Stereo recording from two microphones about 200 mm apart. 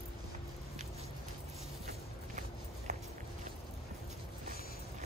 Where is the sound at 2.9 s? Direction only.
35° right (ahead or behind).